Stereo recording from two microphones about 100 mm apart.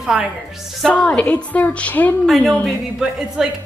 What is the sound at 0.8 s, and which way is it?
A woman's voice, 10° left (ahead or behind).